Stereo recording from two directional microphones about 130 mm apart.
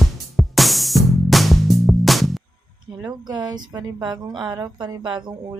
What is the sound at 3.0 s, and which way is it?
A woman's voice, 30° right (ahead or behind).